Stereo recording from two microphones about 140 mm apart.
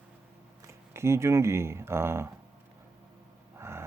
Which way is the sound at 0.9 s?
20° right (ahead or behind).